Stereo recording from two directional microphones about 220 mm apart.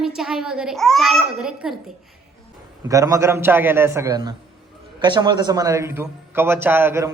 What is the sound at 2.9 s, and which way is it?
Speech, 15° right (ahead or behind).